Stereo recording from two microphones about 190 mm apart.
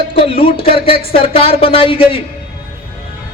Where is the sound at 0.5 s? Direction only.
30° left (ahead or behind).